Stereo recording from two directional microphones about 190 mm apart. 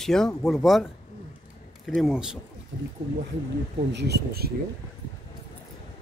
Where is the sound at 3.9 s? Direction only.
60° right (ahead or behind).